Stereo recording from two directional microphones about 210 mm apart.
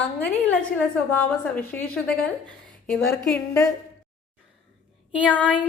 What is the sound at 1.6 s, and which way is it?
A woman's voice, 10° left (ahead or behind).